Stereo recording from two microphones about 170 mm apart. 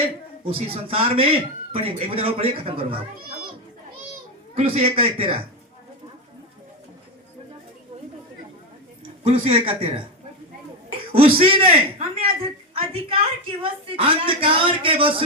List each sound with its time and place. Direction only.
0.4 s a man's voice: 35° right (ahead or behind)
4.5 s a man's voice: 35° right (ahead or behind)
9.2 s a man's voice: 35° right (ahead or behind)
11.2 s a man's voice: 35° right (ahead or behind)